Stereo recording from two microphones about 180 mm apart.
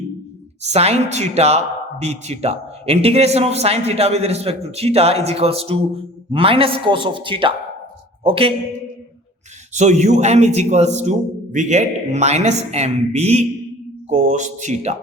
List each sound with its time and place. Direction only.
0.7 s a man's voice: 35° right (ahead or behind)
9.7 s speech: 40° right (ahead or behind)